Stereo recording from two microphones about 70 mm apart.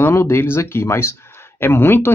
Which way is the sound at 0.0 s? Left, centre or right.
Left.